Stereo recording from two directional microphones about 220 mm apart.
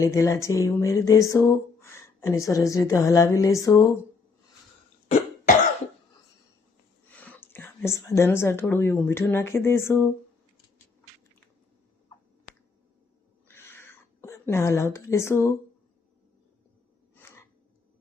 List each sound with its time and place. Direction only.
0.0 s speech: 15° left (ahead or behind)
7.1 s speech: 5° left (ahead or behind)
13.5 s a sound: 10° left (ahead or behind)